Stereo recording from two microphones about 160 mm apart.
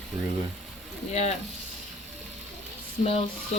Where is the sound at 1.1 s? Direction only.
45° left (ahead or behind).